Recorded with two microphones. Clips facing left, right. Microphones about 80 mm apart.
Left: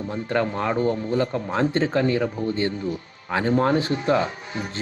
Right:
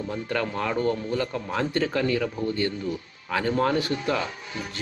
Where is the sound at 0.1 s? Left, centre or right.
Left.